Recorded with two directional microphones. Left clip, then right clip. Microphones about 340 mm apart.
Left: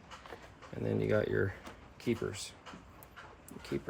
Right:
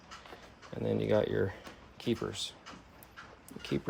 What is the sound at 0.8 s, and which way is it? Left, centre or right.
Speech, centre.